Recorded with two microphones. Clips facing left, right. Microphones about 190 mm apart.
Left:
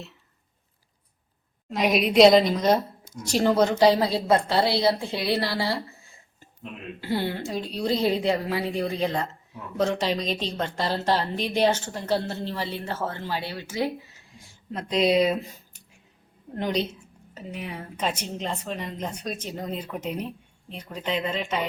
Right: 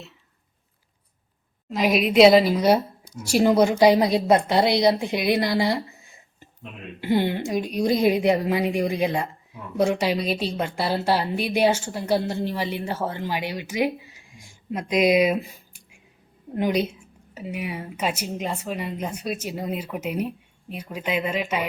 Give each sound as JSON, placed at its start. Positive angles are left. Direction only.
{"t": 1.7, "sound": "a woman's voice", "side_deg": 0}